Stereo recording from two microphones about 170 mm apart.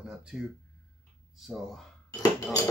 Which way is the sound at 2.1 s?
20° left (ahead or behind).